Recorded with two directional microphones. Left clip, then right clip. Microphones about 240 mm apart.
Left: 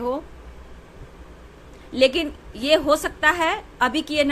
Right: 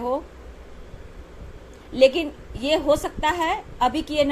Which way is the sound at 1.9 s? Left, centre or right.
Left.